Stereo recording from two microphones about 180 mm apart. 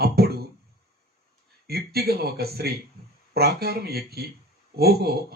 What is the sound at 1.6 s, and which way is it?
Speech, 60° right (ahead or behind).